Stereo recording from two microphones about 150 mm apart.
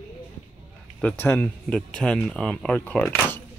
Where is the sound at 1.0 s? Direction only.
15° left (ahead or behind).